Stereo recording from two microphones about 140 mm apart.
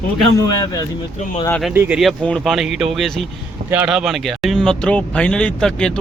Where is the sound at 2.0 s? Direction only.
5° left (ahead or behind).